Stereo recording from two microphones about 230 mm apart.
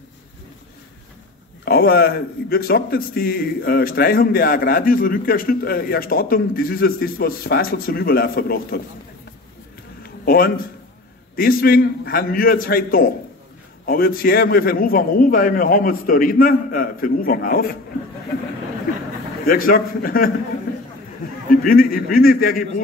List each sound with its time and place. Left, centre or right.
1.6 s a man's voice: left
10.0 s a sound: left
11.3 s a man's voice: left
19.4 s a man's voice: left
21.6 s a man's voice: left